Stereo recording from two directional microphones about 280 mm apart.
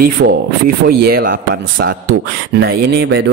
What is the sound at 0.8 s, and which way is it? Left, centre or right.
Speech, right.